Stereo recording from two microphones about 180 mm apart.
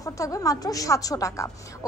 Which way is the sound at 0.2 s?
20° left (ahead or behind).